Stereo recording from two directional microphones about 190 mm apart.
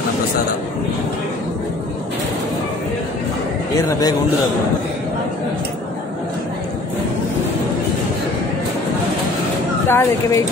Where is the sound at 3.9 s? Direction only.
20° left (ahead or behind).